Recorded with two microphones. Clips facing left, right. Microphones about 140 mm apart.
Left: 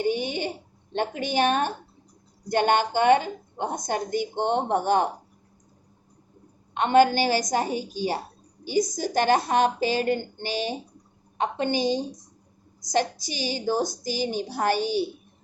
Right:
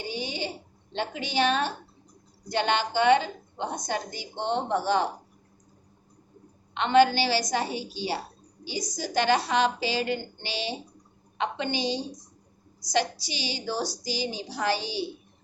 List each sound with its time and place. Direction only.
0.0 s a sound: 55° left (ahead or behind)
0.9 s a woman's voice: 50° left (ahead or behind)
6.7 s a woman's voice: 45° left (ahead or behind)